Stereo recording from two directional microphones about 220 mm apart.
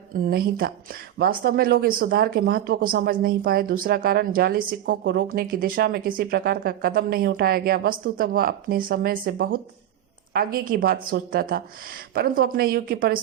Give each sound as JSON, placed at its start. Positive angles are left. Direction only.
{"t": 0.1, "sound": "speech", "side_deg": -40}